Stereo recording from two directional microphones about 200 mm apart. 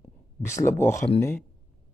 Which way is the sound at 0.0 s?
15° left (ahead or behind).